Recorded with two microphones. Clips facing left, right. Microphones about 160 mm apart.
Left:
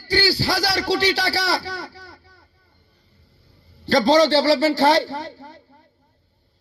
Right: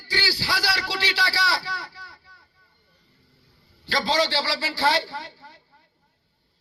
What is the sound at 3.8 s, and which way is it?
A man's voice, 45° left (ahead or behind).